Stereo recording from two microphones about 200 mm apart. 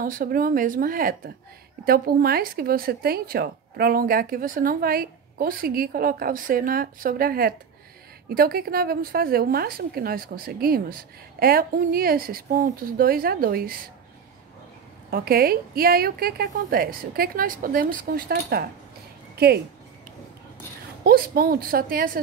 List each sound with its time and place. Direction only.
0.0 s speech: 45° right (ahead or behind)
15.0 s speech: 50° right (ahead or behind)
21.0 s speech: 50° right (ahead or behind)